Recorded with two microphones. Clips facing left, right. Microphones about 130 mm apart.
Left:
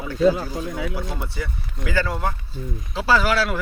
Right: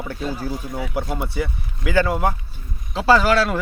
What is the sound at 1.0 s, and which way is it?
Speech, 55° right (ahead or behind).